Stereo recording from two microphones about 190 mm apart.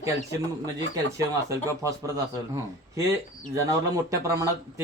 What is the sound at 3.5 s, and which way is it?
Speech, 15° right (ahead or behind).